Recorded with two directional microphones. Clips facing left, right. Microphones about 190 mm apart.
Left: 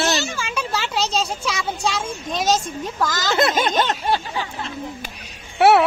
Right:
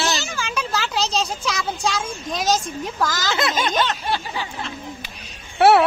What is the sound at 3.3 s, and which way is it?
Speech, 50° left (ahead or behind).